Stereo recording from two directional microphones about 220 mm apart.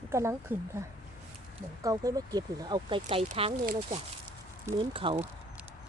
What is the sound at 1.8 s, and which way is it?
Speech, 15° right (ahead or behind).